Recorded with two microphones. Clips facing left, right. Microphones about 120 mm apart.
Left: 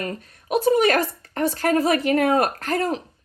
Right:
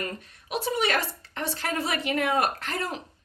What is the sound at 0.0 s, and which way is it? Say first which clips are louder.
A woman's voice: left 4 dB; 45° left (ahead or behind).